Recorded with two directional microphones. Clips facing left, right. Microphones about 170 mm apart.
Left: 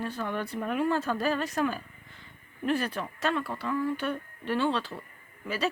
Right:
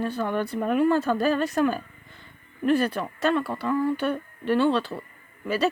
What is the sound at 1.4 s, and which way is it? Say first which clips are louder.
A woman's voice: right 6 dB; 55° right (ahead or behind).